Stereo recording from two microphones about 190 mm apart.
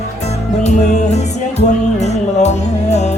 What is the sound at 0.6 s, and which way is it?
Music, 35° left (ahead or behind).